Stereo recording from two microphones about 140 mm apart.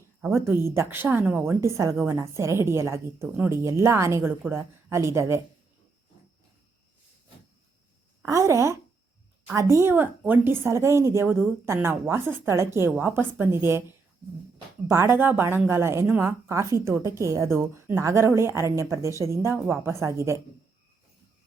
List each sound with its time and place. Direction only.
0.4 s a woman's voice: 20° right (ahead or behind)
8.2 s a woman's voice: 20° right (ahead or behind)
14.8 s a woman's voice: 20° right (ahead or behind)